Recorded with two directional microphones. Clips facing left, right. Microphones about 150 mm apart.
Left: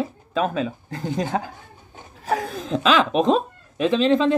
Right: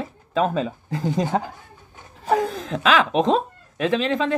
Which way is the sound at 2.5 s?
20° left (ahead or behind).